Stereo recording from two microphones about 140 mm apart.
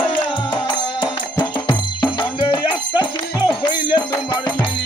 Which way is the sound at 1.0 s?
35° left (ahead or behind).